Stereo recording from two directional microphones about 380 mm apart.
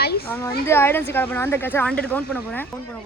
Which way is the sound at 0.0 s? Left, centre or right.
Left.